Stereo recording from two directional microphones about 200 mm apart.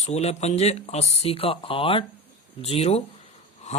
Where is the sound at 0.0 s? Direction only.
35° left (ahead or behind).